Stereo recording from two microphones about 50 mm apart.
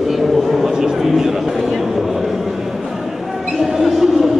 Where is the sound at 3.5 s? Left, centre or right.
Centre.